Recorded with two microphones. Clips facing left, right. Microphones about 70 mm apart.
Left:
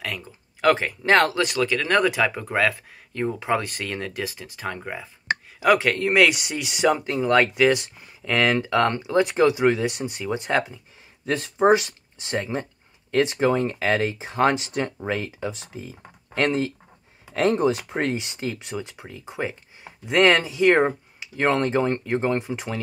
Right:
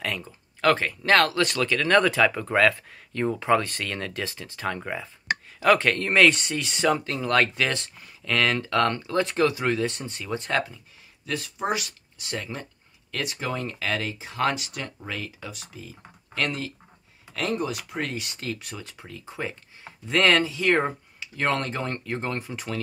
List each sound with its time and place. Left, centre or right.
0.0 s speech: centre
11.2 s speech: left